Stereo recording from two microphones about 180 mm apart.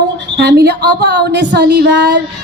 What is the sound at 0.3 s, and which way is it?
A woman's voice, 65° right (ahead or behind).